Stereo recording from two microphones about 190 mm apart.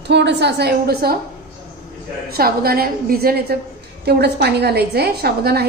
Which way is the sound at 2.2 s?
55° right (ahead or behind).